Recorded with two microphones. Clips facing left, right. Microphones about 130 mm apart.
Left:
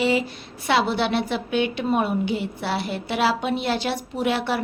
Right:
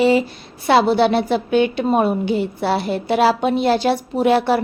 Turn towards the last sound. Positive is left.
turn(degrees=-40)  # may be behind; listen again after turning